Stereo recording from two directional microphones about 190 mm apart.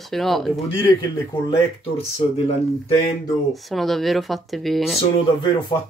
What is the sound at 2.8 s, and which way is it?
Speech, 25° left (ahead or behind).